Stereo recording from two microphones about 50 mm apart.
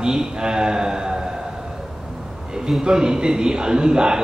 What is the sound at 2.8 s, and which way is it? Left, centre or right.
A man's voice, centre.